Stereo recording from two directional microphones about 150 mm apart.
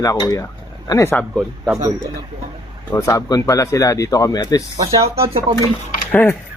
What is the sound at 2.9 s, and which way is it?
Speech, 20° left (ahead or behind).